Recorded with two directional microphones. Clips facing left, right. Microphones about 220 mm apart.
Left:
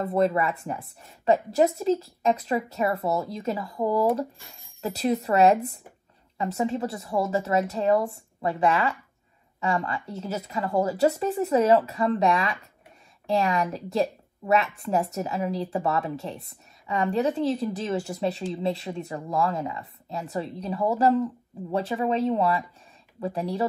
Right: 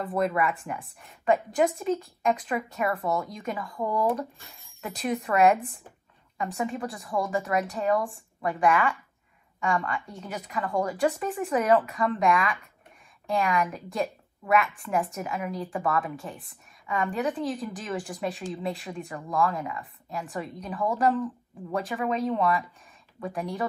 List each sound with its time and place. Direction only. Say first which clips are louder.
0.0 s a woman's voice: left 3 dB; 25° left (ahead or behind)